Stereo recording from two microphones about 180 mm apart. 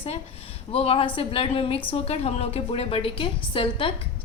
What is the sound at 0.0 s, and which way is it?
A woman's voice, 35° left (ahead or behind).